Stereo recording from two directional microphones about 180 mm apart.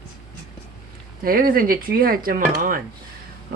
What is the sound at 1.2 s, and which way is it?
Speech, 55° right (ahead or behind).